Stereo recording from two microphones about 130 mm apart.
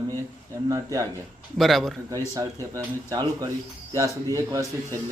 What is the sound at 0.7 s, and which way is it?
Speech, 25° right (ahead or behind).